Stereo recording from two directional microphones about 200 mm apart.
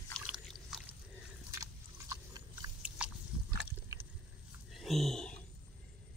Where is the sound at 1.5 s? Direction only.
15° right (ahead or behind).